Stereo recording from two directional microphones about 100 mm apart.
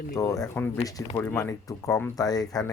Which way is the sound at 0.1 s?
35° left (ahead or behind).